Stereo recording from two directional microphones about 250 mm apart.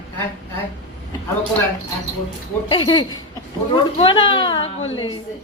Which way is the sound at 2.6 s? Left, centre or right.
Centre.